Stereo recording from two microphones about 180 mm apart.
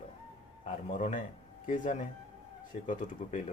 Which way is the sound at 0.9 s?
45° left (ahead or behind).